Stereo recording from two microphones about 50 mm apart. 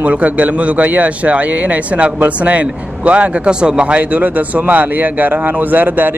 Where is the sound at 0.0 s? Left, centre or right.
Right.